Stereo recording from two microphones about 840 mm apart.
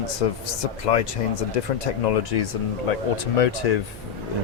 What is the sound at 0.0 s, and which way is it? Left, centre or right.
Speech, left.